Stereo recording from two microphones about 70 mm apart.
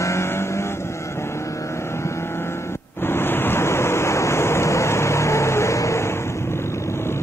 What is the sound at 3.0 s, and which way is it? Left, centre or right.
Waves, left.